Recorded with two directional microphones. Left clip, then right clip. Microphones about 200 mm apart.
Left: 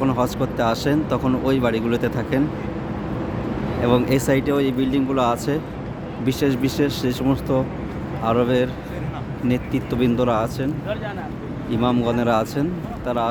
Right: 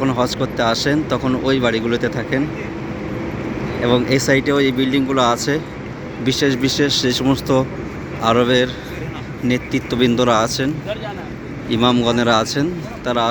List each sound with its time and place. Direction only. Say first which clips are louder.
0.0 s speech: right 3 dB; centre (ahead or behind)
3.8 s speech: right 3 dB; 5° left (ahead or behind)
11.7 s speech: right 5 dB; 5° right (ahead or behind)